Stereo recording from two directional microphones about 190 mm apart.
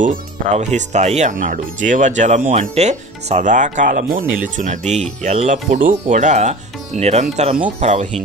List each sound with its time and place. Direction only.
0.0 s speech: 40° right (ahead or behind)